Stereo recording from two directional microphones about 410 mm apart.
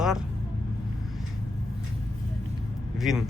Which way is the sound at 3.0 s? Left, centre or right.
Centre.